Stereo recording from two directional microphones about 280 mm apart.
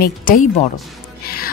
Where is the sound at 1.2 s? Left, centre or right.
Left.